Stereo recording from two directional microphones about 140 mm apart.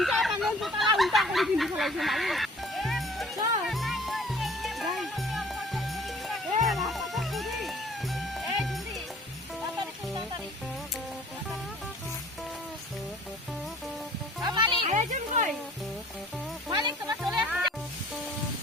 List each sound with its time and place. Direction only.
0.0 s a sound: centre (ahead or behind)
3.7 s music: centre (ahead or behind)
14.4 s music: 30° right (ahead or behind)
14.8 s a sound: 60° right (ahead or behind)
16.6 s music: 30° right (ahead or behind)
17.2 s music: 10° right (ahead or behind)